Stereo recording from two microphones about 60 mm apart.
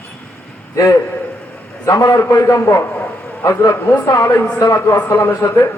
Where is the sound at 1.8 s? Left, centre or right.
Left.